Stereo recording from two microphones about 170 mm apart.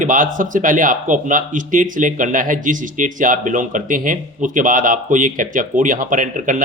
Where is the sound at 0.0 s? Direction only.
50° right (ahead or behind).